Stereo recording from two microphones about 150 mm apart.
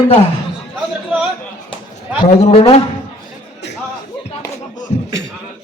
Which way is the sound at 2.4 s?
40° left (ahead or behind).